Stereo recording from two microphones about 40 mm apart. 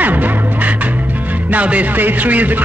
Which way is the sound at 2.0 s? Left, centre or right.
Right.